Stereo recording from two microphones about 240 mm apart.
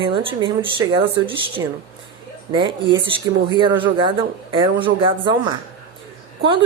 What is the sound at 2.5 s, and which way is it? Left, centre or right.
A woman's voice, centre.